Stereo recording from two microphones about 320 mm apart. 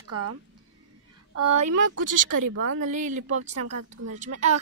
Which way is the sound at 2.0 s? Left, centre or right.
Right.